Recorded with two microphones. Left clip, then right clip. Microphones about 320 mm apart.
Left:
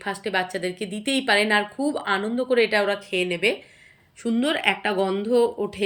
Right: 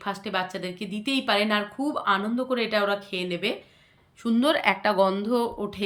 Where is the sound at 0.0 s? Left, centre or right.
Centre.